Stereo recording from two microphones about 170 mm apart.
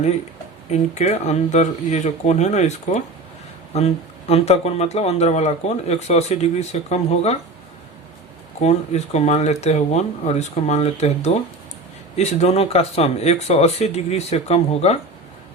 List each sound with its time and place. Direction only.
0.7 s speech: 40° left (ahead or behind)
8.6 s speech: 40° left (ahead or behind)